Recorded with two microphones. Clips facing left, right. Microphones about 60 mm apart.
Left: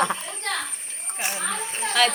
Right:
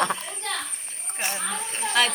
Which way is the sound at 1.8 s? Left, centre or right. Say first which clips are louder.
Right 1 dB; left.